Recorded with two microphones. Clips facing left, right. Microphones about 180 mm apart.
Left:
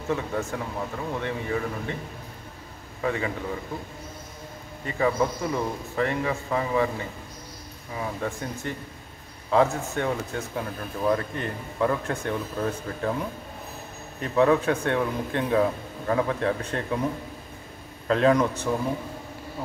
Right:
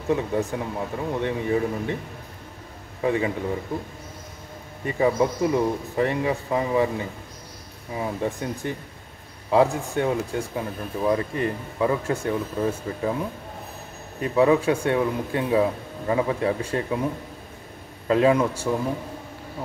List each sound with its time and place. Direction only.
0.1 s speech: 15° right (ahead or behind)
3.0 s a man's voice: 20° right (ahead or behind)
4.8 s speech: 20° right (ahead or behind)
7.9 s speech: 20° right (ahead or behind)
14.2 s speech: 10° right (ahead or behind)
18.0 s speech: 10° right (ahead or behind)